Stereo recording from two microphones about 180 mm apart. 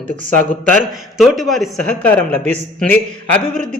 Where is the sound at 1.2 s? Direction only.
Centre (ahead or behind).